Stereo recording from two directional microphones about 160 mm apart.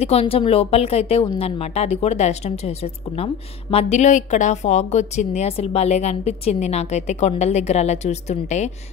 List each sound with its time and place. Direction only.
0.0 s a woman's voice: 40° left (ahead or behind)